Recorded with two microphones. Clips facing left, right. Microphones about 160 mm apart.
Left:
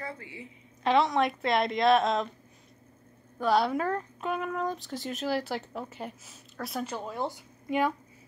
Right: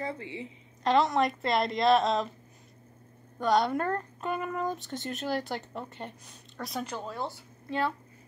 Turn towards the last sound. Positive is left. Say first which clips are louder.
# left 3 dB
turn(degrees=15)  # may be behind; listen again after turning